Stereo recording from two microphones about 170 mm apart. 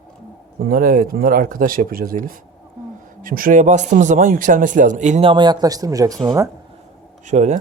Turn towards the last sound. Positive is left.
turn(degrees=-45)  # may be behind; listen again after turning